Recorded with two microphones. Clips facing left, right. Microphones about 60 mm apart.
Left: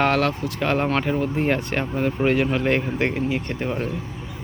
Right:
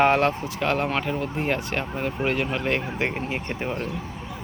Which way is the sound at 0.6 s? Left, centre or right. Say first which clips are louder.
Left 4 dB; centre.